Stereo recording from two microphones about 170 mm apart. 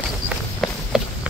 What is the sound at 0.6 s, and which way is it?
Walk, centre (ahead or behind).